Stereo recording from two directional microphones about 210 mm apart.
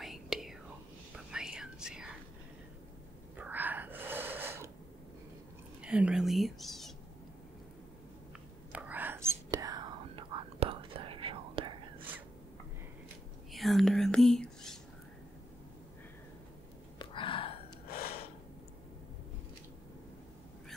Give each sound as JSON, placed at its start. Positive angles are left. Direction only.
{"t": 0.0, "sound": "whispering", "side_deg": 0}
{"t": 3.3, "sound": "a sound", "side_deg": -10}
{"t": 5.8, "sound": "speech", "side_deg": -5}
{"t": 8.7, "sound": "whispering", "side_deg": -5}
{"t": 13.5, "sound": "whispering", "side_deg": 0}
{"t": 17.0, "sound": "a sound", "side_deg": 25}